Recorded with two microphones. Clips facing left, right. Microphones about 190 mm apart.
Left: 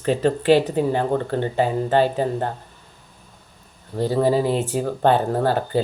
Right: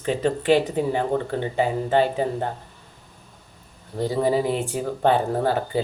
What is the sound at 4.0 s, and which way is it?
Speech, 15° right (ahead or behind).